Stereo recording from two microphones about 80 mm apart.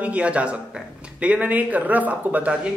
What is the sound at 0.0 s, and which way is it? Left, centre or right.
A man's voice, centre.